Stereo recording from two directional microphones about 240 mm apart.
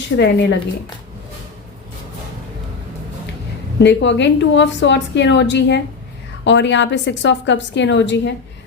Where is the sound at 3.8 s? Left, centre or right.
Left.